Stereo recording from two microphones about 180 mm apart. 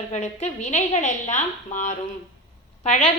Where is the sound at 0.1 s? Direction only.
40° left (ahead or behind).